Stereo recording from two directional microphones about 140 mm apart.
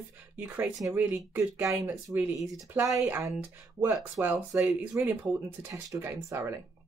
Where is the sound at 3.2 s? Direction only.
5° right (ahead or behind).